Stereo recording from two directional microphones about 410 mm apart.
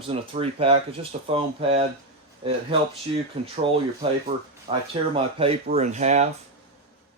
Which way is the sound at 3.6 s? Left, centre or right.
Centre.